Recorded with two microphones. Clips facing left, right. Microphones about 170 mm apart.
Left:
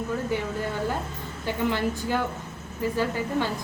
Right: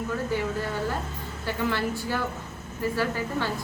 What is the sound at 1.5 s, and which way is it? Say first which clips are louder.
A woman's voice: left 2 dB; 15° left (ahead or behind).